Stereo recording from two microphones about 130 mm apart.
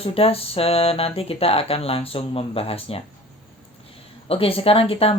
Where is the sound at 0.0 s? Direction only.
50° left (ahead or behind).